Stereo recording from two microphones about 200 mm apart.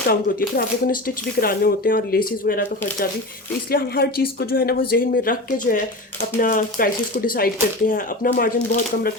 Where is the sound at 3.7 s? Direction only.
50° left (ahead or behind).